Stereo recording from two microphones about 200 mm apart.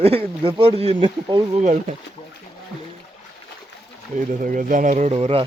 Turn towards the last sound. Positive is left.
turn(degrees=-30)  # may be behind; listen again after turning